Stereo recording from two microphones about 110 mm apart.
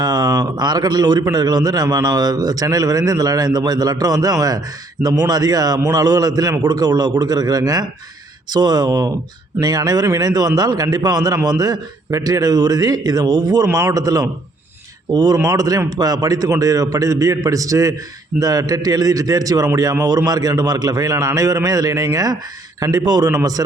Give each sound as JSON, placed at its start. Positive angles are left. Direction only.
{"t": 0.0, "sound": "a man's voice", "side_deg": -35}